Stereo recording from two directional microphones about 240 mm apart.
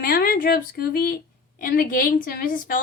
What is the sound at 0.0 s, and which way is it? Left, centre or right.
A woman's voice, left.